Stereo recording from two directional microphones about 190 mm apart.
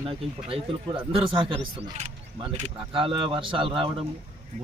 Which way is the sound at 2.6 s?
30° right (ahead or behind).